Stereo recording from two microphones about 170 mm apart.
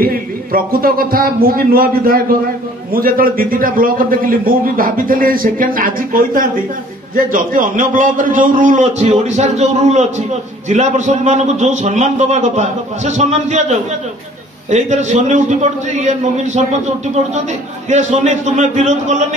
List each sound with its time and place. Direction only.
0.0 s a man's voice: 60° right (ahead or behind); by 16.6 s 45° right (ahead or behind)
17.8 s a man's voice: 45° right (ahead or behind)